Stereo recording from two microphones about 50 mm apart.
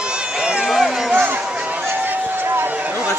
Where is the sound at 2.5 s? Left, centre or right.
Right.